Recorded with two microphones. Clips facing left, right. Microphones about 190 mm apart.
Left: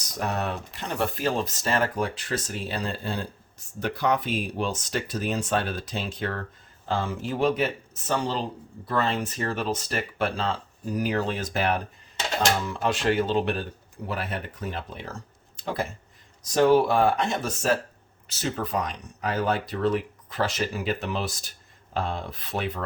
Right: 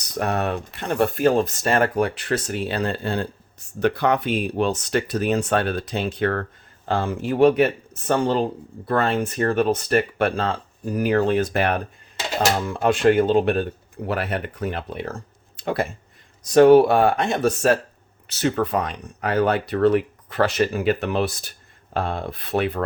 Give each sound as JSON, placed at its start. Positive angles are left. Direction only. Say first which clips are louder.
{"t": 0.1, "sound": "speech", "louder": "right 5 dB", "side_deg": -60}
{"t": 12.5, "sound": "speech", "louder": "right 6 dB", "side_deg": -50}
{"t": 14.1, "sound": "speech", "louder": "right 7 dB", "side_deg": -70}